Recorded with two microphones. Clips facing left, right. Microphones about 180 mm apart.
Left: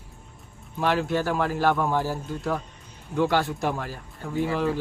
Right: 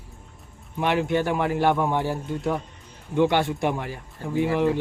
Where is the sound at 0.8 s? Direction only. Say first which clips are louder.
Right 2 dB; 15° right (ahead or behind).